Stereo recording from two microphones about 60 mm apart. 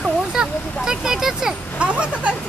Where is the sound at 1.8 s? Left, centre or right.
Centre.